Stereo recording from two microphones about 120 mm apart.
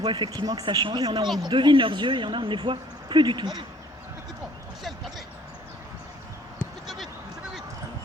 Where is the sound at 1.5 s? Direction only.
40° right (ahead or behind).